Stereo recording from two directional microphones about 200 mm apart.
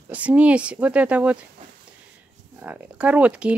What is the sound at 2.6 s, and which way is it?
Speech, 5° right (ahead or behind).